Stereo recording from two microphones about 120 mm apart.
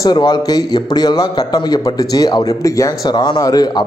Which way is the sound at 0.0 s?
35° left (ahead or behind).